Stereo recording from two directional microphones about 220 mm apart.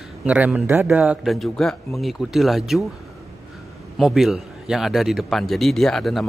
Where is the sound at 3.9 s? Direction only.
Centre (ahead or behind).